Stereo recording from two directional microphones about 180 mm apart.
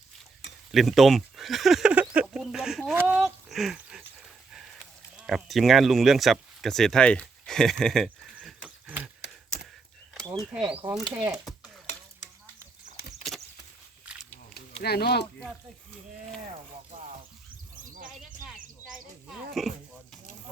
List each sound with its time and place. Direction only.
0.7 s a sound: centre (ahead or behind)
2.2 s speech: centre (ahead or behind)
2.9 s speech: 10° right (ahead or behind)
3.2 s a sound: centre (ahead or behind)
5.1 s speech: centre (ahead or behind)
10.5 s speech: 5° right (ahead or behind)
13.3 s a sound: centre (ahead or behind)
14.8 s speech: 60° left (ahead or behind)
19.6 s speech: centre (ahead or behind)